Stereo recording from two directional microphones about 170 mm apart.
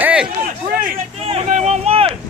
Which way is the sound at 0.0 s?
5° right (ahead or behind).